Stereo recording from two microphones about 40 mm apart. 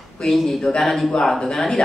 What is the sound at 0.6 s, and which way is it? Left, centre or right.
A woman's voice, centre.